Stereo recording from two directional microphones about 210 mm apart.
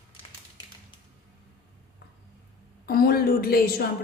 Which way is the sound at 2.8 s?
45° left (ahead or behind).